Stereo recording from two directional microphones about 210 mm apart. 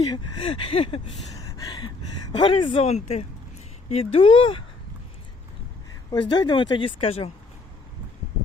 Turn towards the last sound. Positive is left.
turn(degrees=25)  # may be behind; listen again after turning